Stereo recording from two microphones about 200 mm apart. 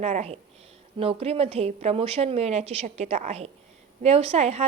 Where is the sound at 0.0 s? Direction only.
35° right (ahead or behind).